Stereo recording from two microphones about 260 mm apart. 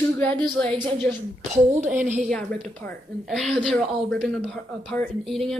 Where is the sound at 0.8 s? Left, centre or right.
Centre.